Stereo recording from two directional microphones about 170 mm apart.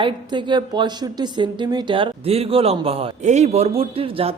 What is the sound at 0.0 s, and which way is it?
Speech, 25° right (ahead or behind).